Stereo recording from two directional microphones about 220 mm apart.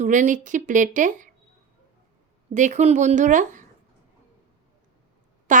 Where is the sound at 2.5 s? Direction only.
35° right (ahead or behind).